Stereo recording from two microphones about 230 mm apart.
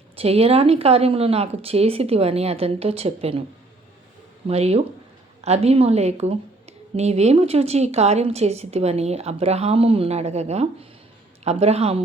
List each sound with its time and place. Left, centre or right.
0.2 s a woman's voice: right
4.4 s a woman's voice: right